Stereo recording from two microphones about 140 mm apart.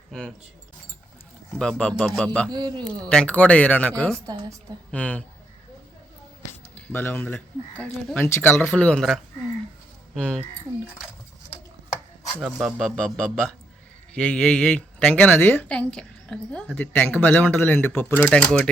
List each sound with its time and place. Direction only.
0.1 s speech: 5° left (ahead or behind)
1.5 s speech: 5° left (ahead or behind)
2.5 s speech: 30° right (ahead or behind)
3.1 s a woman's voice: 10° left (ahead or behind)
6.7 s a woman's voice: 15° left (ahead or behind)
12.4 s speech: 5° right (ahead or behind)
13.0 s a woman's voice: 5° left (ahead or behind)